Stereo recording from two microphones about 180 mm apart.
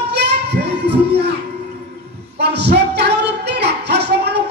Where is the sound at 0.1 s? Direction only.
65° right (ahead or behind).